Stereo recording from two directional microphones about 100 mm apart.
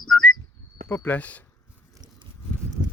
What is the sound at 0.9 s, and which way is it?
Speech, 15° left (ahead or behind).